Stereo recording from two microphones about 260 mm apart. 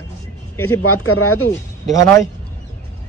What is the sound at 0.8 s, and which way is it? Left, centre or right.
Speech, left.